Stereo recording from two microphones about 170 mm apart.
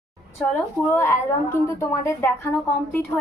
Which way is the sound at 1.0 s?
15° left (ahead or behind).